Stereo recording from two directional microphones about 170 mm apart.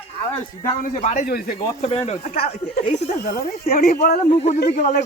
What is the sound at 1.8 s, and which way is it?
Speech, 40° left (ahead or behind).